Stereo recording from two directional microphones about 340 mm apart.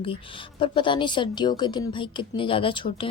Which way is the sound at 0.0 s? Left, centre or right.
Centre.